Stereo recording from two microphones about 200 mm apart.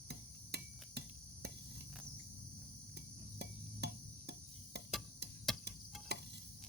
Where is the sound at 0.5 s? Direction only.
55° right (ahead or behind).